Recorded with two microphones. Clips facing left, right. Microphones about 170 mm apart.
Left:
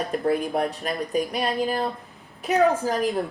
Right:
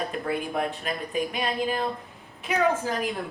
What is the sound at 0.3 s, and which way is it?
A woman's voice, 40° left (ahead or behind).